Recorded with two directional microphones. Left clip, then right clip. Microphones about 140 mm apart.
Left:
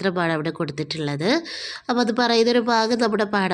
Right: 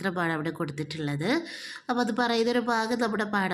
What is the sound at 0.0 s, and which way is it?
Speech, 25° left (ahead or behind).